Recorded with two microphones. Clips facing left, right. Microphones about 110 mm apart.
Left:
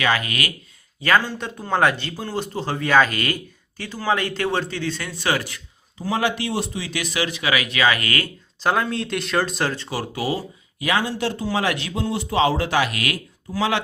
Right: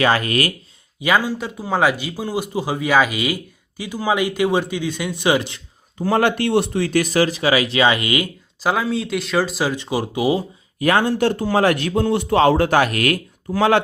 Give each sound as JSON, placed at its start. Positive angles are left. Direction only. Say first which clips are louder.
{"t": 0.0, "sound": "speech", "louder": "right 5 dB", "side_deg": -35}
{"t": 1.0, "sound": "a man's voice", "louder": "right 1 dB", "side_deg": -10}
{"t": 6.0, "sound": "speech", "louder": "right 5 dB", "side_deg": -55}
{"t": 8.6, "sound": "speech", "louder": "right 1 dB", "side_deg": -5}
{"t": 9.7, "sound": "a man's voice", "louder": "right 5 dB", "side_deg": -15}
{"t": 10.8, "sound": "a man's voice", "louder": "right 6 dB", "side_deg": -50}